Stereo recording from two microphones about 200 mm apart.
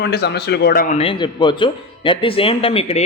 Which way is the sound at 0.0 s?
55° left (ahead or behind).